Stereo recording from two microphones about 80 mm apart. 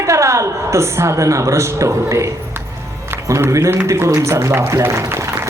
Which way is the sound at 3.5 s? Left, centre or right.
Right.